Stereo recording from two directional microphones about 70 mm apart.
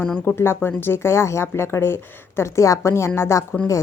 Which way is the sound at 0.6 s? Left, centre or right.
Left.